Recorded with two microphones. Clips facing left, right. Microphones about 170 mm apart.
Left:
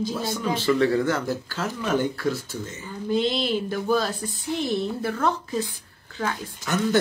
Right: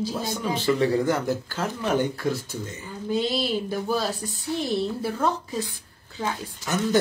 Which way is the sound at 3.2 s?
10° right (ahead or behind).